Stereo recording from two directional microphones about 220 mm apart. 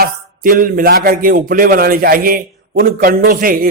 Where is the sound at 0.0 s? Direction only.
40° right (ahead or behind).